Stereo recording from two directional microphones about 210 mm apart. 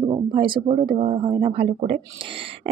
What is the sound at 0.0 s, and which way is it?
Speech, 25° right (ahead or behind).